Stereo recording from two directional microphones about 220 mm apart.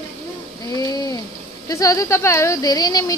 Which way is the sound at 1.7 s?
15° left (ahead or behind).